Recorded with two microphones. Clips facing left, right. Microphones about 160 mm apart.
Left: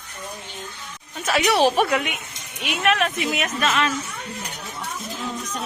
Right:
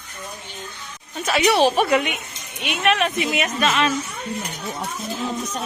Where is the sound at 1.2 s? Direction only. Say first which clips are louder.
Right 1 dB; centre (ahead or behind).